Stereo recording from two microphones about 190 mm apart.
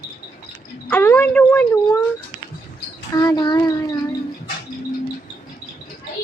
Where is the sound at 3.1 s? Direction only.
20° left (ahead or behind).